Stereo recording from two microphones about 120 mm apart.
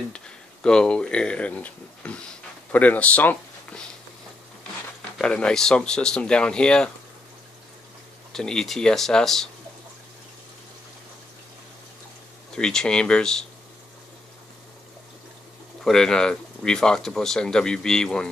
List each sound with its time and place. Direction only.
0.1 s speech: 5° left (ahead or behind)
5.2 s speech: 5° left (ahead or behind)
8.3 s speech: 5° left (ahead or behind)
12.5 s speech: 5° left (ahead or behind)
15.8 s speech: 5° left (ahead or behind)